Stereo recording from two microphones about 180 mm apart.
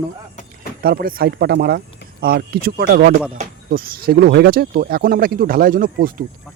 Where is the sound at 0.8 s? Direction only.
55° right (ahead or behind).